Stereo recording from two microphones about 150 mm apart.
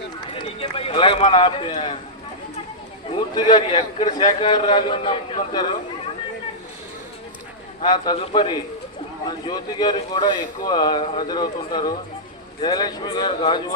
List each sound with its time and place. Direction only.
0.3 s speech: 40° left (ahead or behind)
3.3 s a man's voice: 30° left (ahead or behind)
7.8 s a man's voice: 30° left (ahead or behind)
11.0 s a man's voice: 40° left (ahead or behind)
11.3 s speech: 30° left (ahead or behind)